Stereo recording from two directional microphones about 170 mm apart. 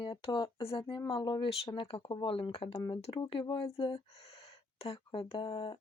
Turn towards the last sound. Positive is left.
turn(degrees=30)  # may be behind; listen again after turning